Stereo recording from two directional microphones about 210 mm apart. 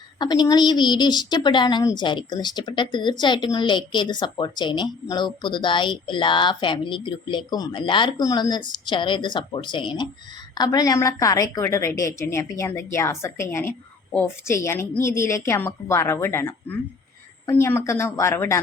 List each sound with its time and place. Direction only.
0.2 s a woman's voice: 20° left (ahead or behind)